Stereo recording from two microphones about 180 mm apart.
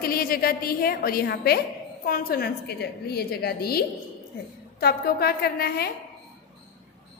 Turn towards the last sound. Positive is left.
turn(degrees=60)  # may be behind; listen again after turning